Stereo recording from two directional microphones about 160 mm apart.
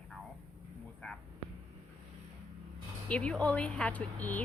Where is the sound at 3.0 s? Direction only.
5° left (ahead or behind).